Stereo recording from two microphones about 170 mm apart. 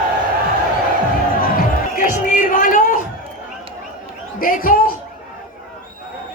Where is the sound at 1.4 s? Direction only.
55° left (ahead or behind).